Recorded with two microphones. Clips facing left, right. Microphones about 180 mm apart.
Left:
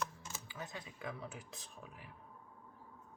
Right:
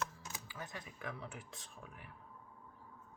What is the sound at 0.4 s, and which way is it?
Speech, 20° left (ahead or behind).